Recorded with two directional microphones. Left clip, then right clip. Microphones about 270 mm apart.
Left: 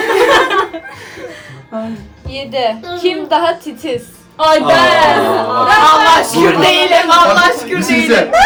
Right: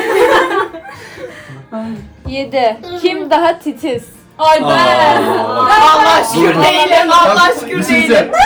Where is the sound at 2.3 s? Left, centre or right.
Right.